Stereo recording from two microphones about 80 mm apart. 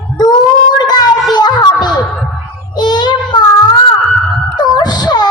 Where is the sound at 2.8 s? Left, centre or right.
Left.